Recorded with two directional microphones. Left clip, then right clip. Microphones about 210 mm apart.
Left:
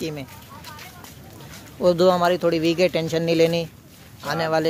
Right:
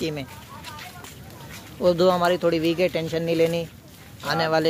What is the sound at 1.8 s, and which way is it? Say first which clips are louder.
Speech: left 2 dB; 15° left (ahead or behind).